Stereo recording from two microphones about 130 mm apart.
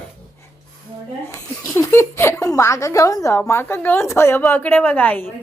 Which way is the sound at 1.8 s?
20° left (ahead or behind).